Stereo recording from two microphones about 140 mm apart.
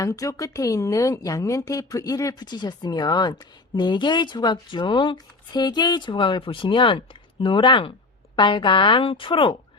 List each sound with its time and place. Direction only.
0.0 s speech: 25° left (ahead or behind)